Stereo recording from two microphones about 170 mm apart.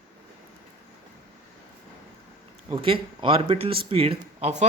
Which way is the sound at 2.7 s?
30° right (ahead or behind).